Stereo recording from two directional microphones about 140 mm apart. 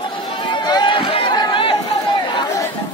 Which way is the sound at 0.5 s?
35° left (ahead or behind).